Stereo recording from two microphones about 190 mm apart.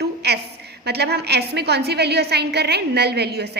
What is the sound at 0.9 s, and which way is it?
A woman's voice, 60° right (ahead or behind).